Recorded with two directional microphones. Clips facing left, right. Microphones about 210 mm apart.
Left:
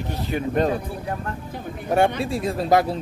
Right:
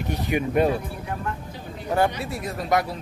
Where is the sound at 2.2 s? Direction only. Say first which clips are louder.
Left 6 dB; 25° left (ahead or behind).